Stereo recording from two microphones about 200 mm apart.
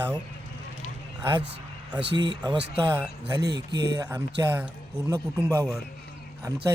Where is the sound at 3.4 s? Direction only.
55° right (ahead or behind).